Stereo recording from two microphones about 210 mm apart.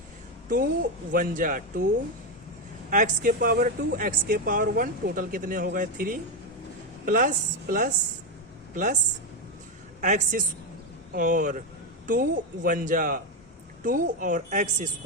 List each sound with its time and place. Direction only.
0.4 s speech: 45° right (ahead or behind)
2.9 s speech: 40° right (ahead or behind)
10.0 s a woman's voice: 35° right (ahead or behind)